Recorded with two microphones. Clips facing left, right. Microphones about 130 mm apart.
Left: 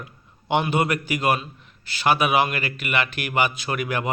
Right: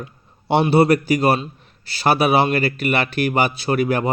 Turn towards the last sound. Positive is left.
turn(degrees=-35)  # may be behind; listen again after turning